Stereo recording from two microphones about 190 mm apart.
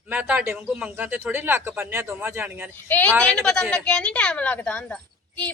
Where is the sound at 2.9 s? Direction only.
10° left (ahead or behind).